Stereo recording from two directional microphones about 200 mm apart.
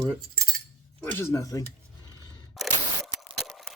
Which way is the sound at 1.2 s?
15° left (ahead or behind).